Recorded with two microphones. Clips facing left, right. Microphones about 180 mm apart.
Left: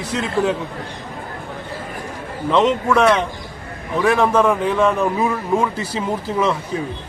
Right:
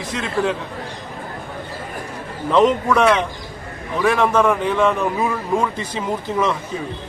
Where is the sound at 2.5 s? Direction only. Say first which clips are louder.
Right 1 dB; 5° right (ahead or behind).